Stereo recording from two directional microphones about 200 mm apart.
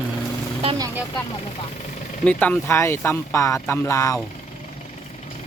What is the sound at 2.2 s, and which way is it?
Speech, 10° left (ahead or behind).